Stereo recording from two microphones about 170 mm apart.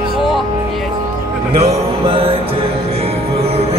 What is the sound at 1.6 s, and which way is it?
Music, 35° right (ahead or behind).